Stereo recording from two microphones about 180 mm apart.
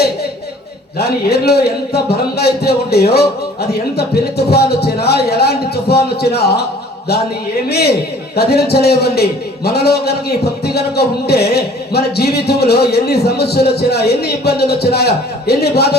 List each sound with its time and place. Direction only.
0.9 s a man's voice: 65° left (ahead or behind)
7.7 s a man's voice: 65° left (ahead or behind)